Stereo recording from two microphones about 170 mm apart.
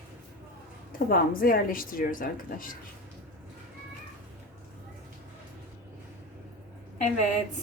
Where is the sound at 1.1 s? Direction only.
60° left (ahead or behind).